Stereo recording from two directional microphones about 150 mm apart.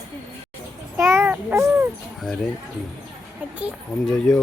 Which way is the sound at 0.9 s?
15° right (ahead or behind).